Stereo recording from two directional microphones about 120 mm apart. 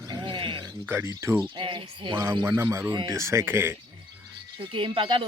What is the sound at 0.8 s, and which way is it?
Speech, 20° right (ahead or behind).